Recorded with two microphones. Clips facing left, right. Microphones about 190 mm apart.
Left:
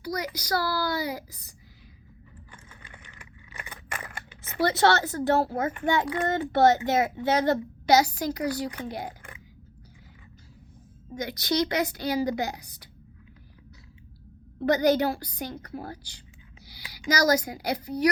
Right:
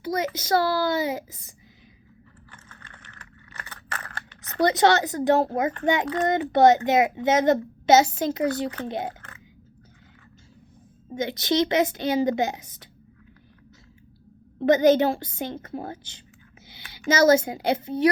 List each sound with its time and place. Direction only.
0.0 s a child's voice: 25° right (ahead or behind)
2.5 s computer keyboard: 10° left (ahead or behind)
4.6 s a child's voice: 20° right (ahead or behind)
11.1 s a child's voice: 25° right (ahead or behind)
14.6 s a child's voice: 20° right (ahead or behind)
16.6 s a sound: 25° right (ahead or behind)
17.1 s a child's voice: 25° right (ahead or behind)